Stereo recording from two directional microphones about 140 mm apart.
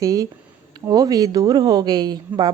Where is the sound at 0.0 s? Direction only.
25° right (ahead or behind).